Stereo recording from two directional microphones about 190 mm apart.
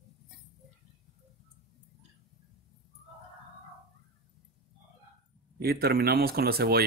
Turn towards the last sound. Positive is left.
turn(degrees=-55)  # may be behind; listen again after turning